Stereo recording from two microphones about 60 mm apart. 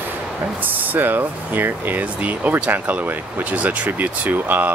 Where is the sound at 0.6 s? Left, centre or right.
Right.